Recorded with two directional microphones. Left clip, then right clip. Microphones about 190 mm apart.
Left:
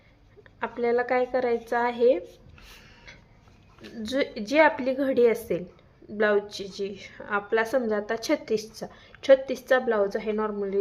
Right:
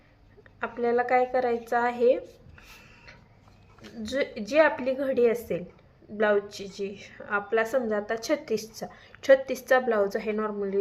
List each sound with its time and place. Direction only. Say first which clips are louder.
0.6 s a woman's voice: left 1 dB; 10° left (ahead or behind)
3.9 s a woman's voice: left 1 dB; 15° left (ahead or behind)